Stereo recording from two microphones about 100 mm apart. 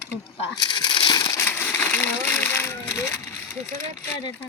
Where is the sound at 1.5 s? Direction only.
25° left (ahead or behind).